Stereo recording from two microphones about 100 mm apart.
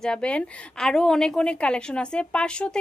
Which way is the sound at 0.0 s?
10° left (ahead or behind).